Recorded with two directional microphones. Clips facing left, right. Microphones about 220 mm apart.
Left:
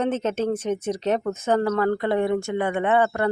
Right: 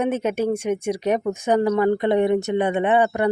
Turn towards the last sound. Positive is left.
turn(degrees=-15)  # may be behind; listen again after turning